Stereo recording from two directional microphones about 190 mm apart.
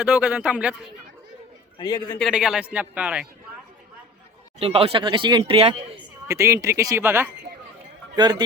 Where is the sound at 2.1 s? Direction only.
Centre (ahead or behind).